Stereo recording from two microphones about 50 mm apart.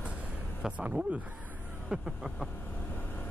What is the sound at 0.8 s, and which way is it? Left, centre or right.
Speech, right.